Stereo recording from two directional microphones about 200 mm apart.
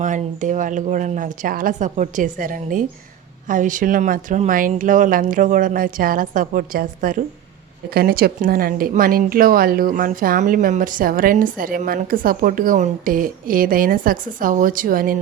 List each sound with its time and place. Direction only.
0.0 s speech: 40° right (ahead or behind)